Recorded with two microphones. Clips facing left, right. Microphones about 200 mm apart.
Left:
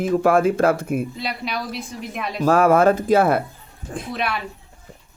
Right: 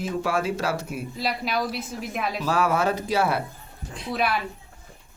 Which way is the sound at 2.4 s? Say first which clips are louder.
Left 9 dB; 50° left (ahead or behind).